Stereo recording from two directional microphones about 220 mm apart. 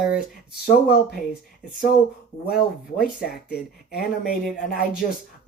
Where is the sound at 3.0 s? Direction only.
45° left (ahead or behind).